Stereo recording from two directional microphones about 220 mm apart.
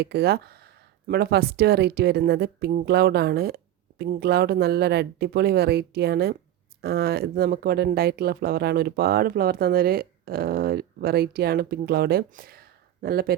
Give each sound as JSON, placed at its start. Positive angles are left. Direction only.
{"t": 0.0, "sound": "speech", "side_deg": -45}